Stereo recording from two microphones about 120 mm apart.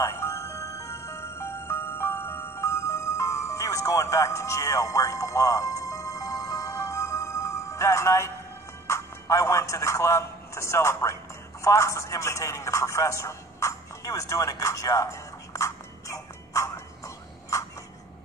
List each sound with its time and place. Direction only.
0.0 s music: 25° left (ahead or behind)
8.8 s a man's voice: 25° left (ahead or behind)
11.6 s a sound: 25° left (ahead or behind)